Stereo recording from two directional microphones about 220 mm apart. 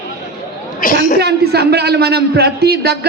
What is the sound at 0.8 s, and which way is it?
Speech, 40° left (ahead or behind).